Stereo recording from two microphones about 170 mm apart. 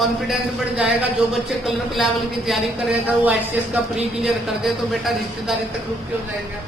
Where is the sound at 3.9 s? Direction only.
Centre (ahead or behind).